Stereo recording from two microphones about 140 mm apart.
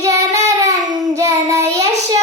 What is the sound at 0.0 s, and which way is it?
Child singing, 25° right (ahead or behind).